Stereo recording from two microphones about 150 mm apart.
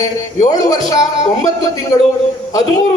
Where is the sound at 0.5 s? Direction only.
25° left (ahead or behind).